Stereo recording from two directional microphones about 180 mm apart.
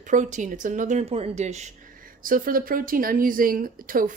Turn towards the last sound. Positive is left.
turn(degrees=-50)  # may be behind; listen again after turning